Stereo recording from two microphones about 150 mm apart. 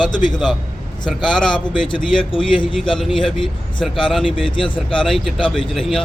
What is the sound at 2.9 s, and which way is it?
A man's voice, centre (ahead or behind).